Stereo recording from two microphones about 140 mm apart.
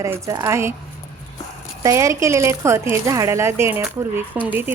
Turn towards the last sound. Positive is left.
turn(degrees=-15)  # may be behind; listen again after turning